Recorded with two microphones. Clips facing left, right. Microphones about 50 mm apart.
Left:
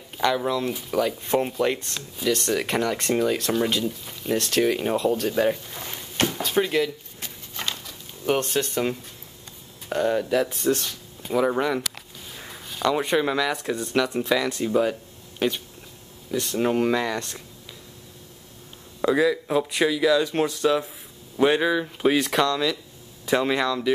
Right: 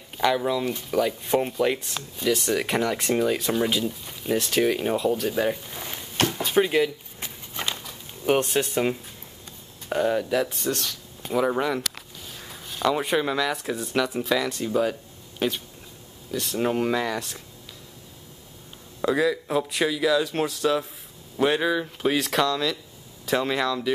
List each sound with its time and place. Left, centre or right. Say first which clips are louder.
0.2 s speech: even; centre
6.1 s a sound: even; centre
6.4 s walk: right 3 dB; centre
8.5 s speech: right 1 dB; centre
12.4 s a sound: left 1 dB; centre
12.8 s speech: left 1 dB; centre
19.0 s speech: left 2 dB; centre